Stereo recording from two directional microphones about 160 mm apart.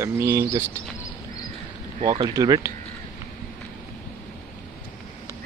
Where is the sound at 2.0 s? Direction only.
20° right (ahead or behind).